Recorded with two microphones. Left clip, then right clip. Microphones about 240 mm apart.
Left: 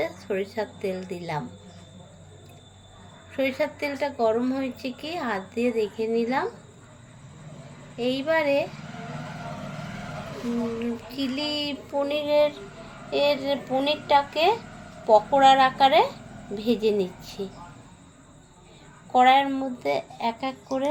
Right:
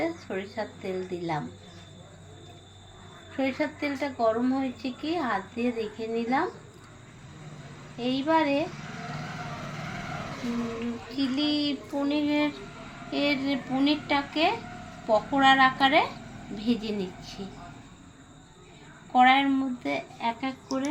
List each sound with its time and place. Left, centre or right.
0.0 s a woman's voice: left
3.3 s a woman's voice: left
7.9 s a woman's voice: left
11.2 s a woman's voice: left
19.1 s a woman's voice: left